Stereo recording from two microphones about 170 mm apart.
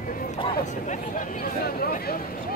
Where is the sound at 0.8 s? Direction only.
50° left (ahead or behind).